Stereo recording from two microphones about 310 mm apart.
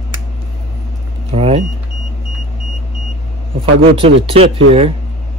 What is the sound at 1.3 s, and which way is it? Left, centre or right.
Vehicle, centre.